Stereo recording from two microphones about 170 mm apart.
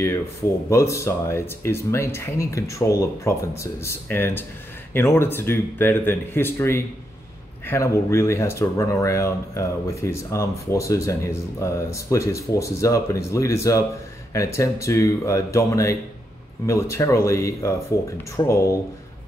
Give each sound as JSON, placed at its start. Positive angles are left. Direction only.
{"t": 0.7, "sound": "speech", "side_deg": 15}